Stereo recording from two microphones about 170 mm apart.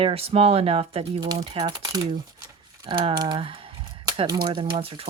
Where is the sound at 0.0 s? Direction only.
35° right (ahead or behind).